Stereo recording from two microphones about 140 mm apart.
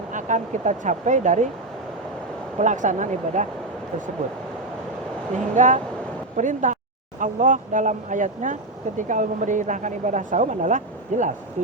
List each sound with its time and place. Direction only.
0.1 s speech: 65° right (ahead or behind)
2.6 s speech: 60° right (ahead or behind)
5.5 s speech: 60° right (ahead or behind)